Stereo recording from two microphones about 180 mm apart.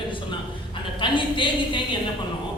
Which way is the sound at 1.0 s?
25° left (ahead or behind).